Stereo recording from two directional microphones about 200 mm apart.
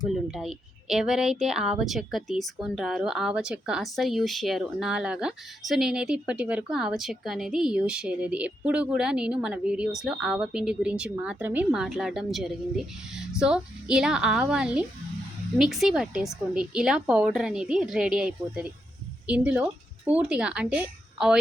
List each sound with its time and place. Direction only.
0.1 s speech: centre (ahead or behind)